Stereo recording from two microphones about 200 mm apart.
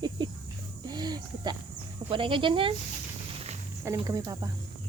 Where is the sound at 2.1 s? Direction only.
25° right (ahead or behind).